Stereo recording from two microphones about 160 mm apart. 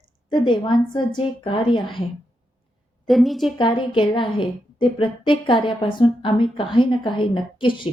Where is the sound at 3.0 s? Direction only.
Centre (ahead or behind).